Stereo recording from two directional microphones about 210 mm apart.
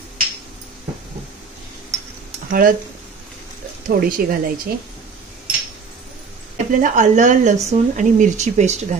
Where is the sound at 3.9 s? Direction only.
45° right (ahead or behind).